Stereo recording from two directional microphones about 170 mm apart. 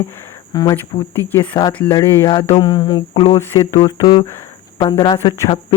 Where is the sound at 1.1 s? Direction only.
10° left (ahead or behind).